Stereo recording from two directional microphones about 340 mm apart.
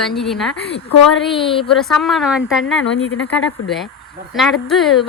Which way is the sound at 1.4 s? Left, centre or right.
Centre.